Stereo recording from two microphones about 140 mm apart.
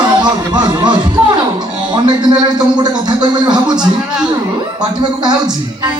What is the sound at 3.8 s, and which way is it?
Speech, 5° right (ahead or behind).